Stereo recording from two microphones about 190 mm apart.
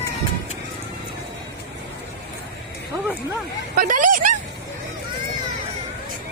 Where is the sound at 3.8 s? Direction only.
45° right (ahead or behind).